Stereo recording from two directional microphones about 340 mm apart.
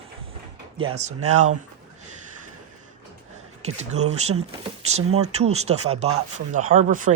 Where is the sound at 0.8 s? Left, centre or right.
Centre.